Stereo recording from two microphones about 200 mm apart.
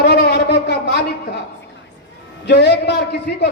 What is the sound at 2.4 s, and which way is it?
A man's voice, 60° left (ahead or behind).